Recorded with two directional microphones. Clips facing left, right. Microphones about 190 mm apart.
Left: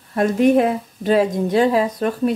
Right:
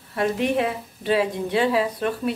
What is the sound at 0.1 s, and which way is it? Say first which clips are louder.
A woman's voice: left 7 dB; 45° left (ahead or behind).